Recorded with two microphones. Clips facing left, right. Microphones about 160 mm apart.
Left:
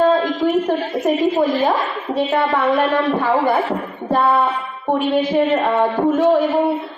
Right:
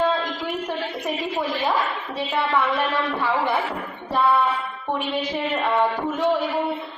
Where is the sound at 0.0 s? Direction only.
50° left (ahead or behind).